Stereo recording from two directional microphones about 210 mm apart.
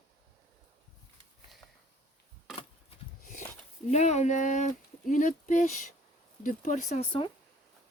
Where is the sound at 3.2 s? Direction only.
40° left (ahead or behind).